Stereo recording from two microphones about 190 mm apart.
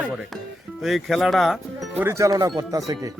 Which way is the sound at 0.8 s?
Centre (ahead or behind).